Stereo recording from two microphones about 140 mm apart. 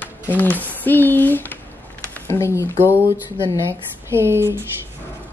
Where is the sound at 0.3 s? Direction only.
10° left (ahead or behind).